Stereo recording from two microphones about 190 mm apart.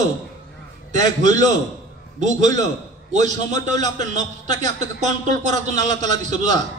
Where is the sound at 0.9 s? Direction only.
40° right (ahead or behind).